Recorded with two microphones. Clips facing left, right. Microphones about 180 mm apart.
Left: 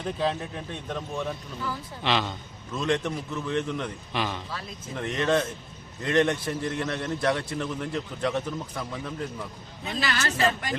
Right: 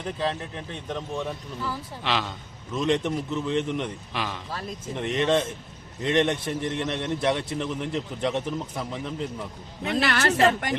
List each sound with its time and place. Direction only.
0.2 s a man's voice: 10° left (ahead or behind)
2.7 s a man's voice: 20° right (ahead or behind)
4.1 s a man's voice: centre (ahead or behind)
4.9 s a man's voice: 20° right (ahead or behind)
9.8 s a woman's voice: 65° right (ahead or behind)